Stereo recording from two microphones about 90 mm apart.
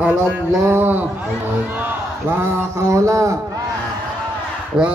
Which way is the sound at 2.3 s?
25° right (ahead or behind).